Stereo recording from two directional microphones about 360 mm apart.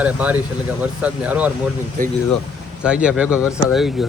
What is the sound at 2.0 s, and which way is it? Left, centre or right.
Speech, right.